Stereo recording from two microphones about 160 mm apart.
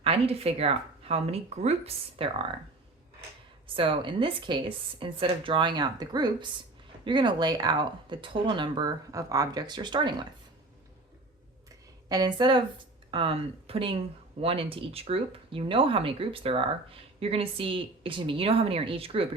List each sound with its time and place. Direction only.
0.0 s speech: 40° right (ahead or behind)
3.7 s speech: 35° right (ahead or behind)
12.0 s speech: 25° right (ahead or behind)